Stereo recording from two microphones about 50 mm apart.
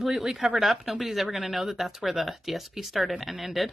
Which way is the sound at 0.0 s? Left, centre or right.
Centre.